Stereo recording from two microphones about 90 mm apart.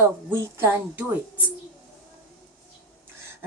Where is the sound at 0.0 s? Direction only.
30° right (ahead or behind).